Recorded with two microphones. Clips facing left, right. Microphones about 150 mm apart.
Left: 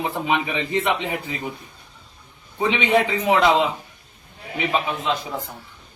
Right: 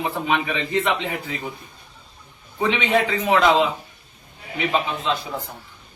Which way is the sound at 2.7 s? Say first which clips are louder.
Left 1 dB; 15° left (ahead or behind).